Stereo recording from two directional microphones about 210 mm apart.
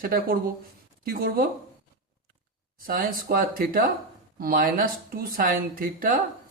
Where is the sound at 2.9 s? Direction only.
45° right (ahead or behind).